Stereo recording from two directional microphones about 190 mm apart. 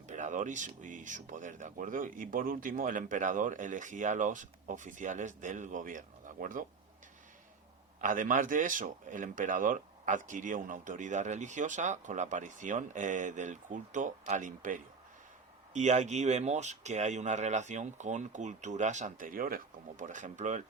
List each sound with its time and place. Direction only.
0.1 s speech: 40° right (ahead or behind)
8.0 s speech: 45° right (ahead or behind)